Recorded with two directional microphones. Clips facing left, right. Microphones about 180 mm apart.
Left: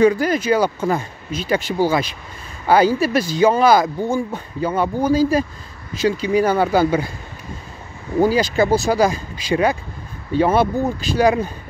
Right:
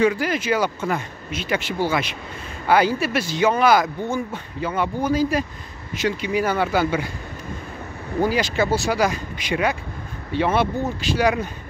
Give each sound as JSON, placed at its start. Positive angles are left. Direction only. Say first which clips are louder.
{"t": 0.0, "sound": "speech", "louder": "left 5 dB", "side_deg": 40}
{"t": 8.2, "sound": "speech", "louder": "left 5 dB", "side_deg": 35}